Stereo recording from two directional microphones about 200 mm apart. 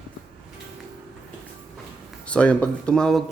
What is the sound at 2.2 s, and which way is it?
Speech, 5° left (ahead or behind).